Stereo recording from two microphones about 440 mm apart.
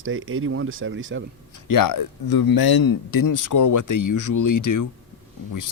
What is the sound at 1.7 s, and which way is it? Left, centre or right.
Speech, left.